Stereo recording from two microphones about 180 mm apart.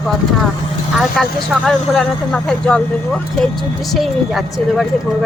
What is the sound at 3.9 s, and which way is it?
Speech, centre (ahead or behind).